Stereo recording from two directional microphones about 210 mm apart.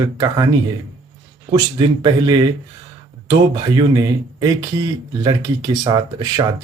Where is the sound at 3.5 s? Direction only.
20° right (ahead or behind).